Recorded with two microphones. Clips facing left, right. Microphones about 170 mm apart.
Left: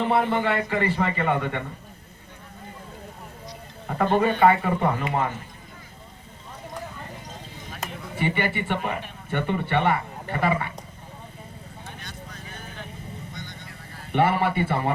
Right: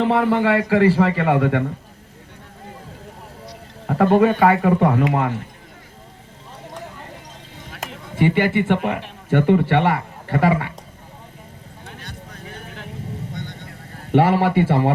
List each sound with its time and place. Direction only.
0.0 s a man's voice: 90° right
3.8 s speech: 75° right (ahead or behind)
7.7 s speech: 90° right
12.0 s vehicle: 70° right (ahead or behind)
13.3 s a sound: 60° right (ahead or behind); by 14.9 s 85° right